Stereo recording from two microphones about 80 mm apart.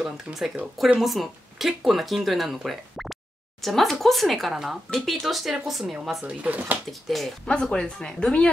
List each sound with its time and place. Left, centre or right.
0.0 s speech: centre
5.9 s speech: centre
6.9 s speech: centre
7.4 s speech: centre